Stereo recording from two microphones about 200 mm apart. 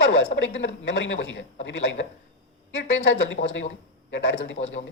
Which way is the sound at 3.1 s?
70° left (ahead or behind).